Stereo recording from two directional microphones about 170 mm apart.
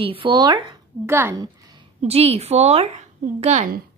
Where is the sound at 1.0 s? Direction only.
15° right (ahead or behind).